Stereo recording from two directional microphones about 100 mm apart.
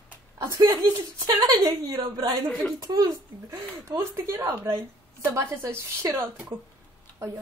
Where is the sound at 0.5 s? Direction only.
35° right (ahead or behind).